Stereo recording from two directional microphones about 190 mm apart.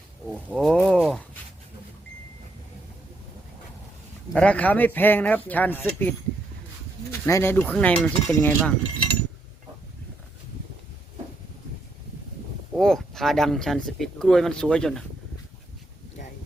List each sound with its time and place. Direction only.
0.4 s a sound: centre (ahead or behind)
4.3 s speech: 5° left (ahead or behind)
12.7 s speech: centre (ahead or behind)